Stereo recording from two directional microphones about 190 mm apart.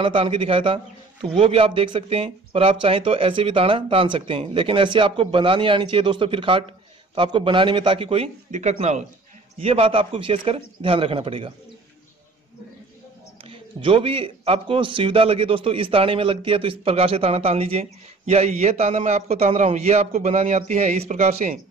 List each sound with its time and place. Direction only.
0.0 s speech: 25° right (ahead or behind)
13.4 s a man's voice: 30° right (ahead or behind)